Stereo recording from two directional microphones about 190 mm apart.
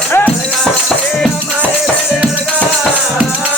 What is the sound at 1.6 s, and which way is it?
Music, 5° right (ahead or behind).